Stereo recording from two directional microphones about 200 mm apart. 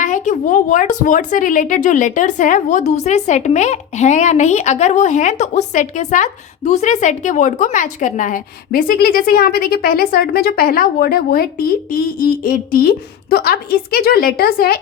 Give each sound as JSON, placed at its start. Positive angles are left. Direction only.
{"t": 0.0, "sound": "a woman's voice", "side_deg": 40}